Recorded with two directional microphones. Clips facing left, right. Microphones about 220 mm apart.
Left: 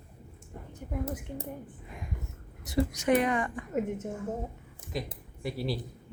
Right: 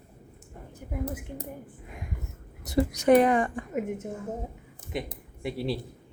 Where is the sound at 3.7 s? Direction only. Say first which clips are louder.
Left 1 dB; 10° right (ahead or behind).